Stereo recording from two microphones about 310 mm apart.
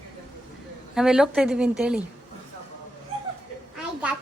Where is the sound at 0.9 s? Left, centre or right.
Centre.